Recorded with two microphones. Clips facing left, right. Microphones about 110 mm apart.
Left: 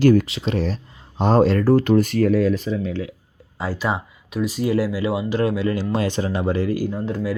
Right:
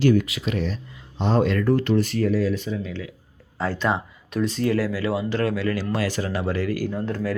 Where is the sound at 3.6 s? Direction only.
10° left (ahead or behind).